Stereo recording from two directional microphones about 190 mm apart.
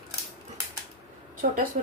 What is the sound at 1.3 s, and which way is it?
Speech, 45° right (ahead or behind).